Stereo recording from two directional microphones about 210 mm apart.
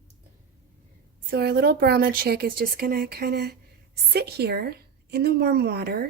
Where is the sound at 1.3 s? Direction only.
50° right (ahead or behind).